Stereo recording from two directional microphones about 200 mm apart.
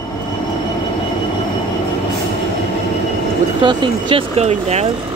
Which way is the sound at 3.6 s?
25° right (ahead or behind).